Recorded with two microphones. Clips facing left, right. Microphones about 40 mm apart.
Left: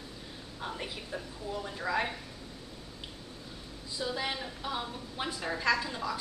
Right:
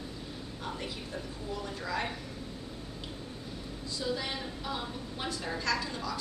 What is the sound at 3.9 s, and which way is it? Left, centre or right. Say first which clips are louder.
A woman's voice: left 1 dB; centre.